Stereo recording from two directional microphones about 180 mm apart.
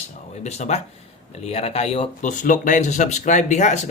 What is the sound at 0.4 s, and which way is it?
Speech, 35° left (ahead or behind).